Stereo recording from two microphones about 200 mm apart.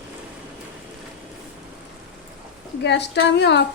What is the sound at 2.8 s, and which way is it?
Speech, 60° left (ahead or behind).